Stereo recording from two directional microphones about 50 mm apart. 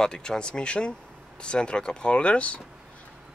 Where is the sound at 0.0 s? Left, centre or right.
Centre.